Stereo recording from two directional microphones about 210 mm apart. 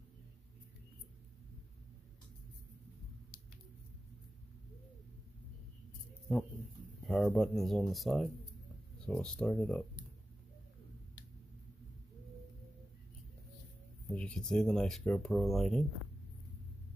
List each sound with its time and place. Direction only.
6.3 s speech: centre (ahead or behind)
14.1 s speech: 5° left (ahead or behind)